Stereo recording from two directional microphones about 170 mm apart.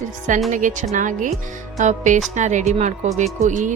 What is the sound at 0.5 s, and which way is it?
Speech, 45° right (ahead or behind).